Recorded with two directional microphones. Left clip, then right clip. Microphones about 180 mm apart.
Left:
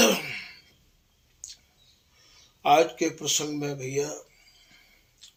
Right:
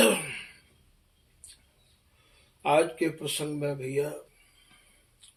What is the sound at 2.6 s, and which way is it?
Speech, 25° left (ahead or behind).